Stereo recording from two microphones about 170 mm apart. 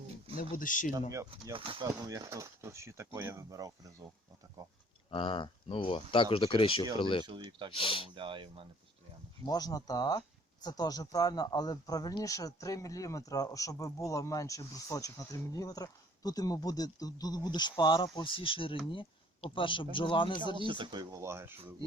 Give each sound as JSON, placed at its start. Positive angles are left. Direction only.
{"t": 0.5, "sound": "speech", "side_deg": 50}
{"t": 1.5, "sound": "speech", "side_deg": -30}
{"t": 1.9, "sound": "speech", "side_deg": -20}
{"t": 5.1, "sound": "speech", "side_deg": 30}
{"t": 7.3, "sound": "speech", "side_deg": -30}
{"t": 7.7, "sound": "speech", "side_deg": 30}
{"t": 8.1, "sound": "speech", "side_deg": -30}
{"t": 9.5, "sound": "speech", "side_deg": 20}
{"t": 20.6, "sound": "speech", "side_deg": -30}